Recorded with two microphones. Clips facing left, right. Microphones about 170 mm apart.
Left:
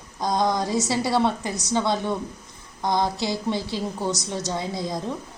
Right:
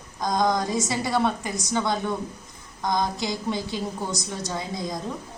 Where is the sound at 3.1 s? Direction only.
20° right (ahead or behind).